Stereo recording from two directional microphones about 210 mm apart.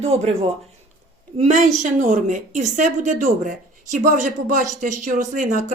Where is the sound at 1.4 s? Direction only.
35° right (ahead or behind).